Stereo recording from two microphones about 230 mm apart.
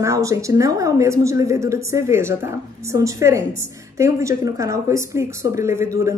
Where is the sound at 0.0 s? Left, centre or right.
Centre.